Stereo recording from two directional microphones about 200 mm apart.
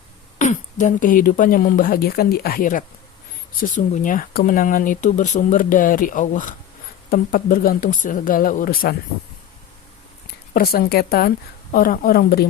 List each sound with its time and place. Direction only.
0.3 s speech: 40° left (ahead or behind)
10.5 s speech: 50° left (ahead or behind)